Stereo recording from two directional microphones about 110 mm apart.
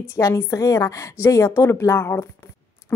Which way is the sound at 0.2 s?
25° left (ahead or behind).